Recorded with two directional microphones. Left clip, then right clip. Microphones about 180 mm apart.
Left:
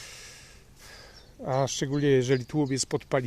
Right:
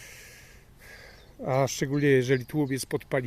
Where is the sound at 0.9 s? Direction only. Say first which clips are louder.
Right 2 dB; 10° right (ahead or behind).